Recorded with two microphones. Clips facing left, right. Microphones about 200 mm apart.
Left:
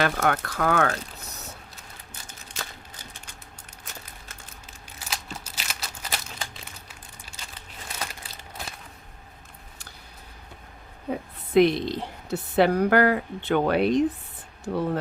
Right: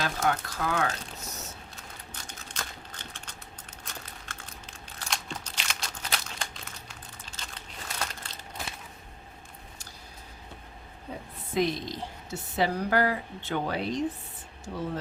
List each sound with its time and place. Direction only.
0.0 s a woman's voice: 60° left (ahead or behind)
2.5 s typewriter: 5° left (ahead or behind)
3.0 s typing: 10° left (ahead or behind)
4.9 s crumpling: 5° left (ahead or behind)
7.9 s crushing: 5° left (ahead or behind)
11.1 s a woman's voice: 65° left (ahead or behind)